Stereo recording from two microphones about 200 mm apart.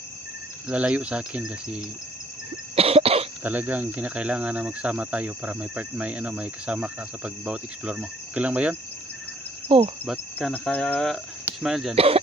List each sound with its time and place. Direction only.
0.7 s speech: 5° right (ahead or behind)
2.7 s cough: 30° right (ahead or behind)
3.4 s speech: 10° right (ahead or behind)
9.6 s insect: 30° right (ahead or behind)
10.1 s cricket: 5° left (ahead or behind)
11.4 s speech: centre (ahead or behind)
11.9 s speech: 30° right (ahead or behind)